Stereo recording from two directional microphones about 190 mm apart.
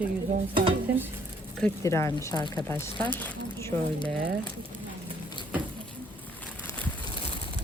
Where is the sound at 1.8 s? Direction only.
15° left (ahead or behind).